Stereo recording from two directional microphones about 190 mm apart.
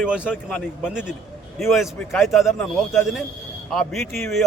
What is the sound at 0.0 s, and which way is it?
A man's voice, 5° right (ahead or behind).